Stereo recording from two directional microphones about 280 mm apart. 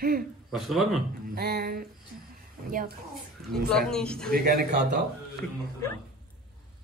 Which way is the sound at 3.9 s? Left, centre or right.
Centre.